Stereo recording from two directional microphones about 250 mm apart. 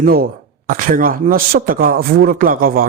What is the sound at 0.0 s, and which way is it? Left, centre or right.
Speech, right.